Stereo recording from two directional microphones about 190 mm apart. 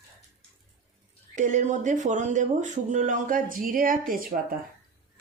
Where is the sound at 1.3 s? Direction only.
40° right (ahead or behind).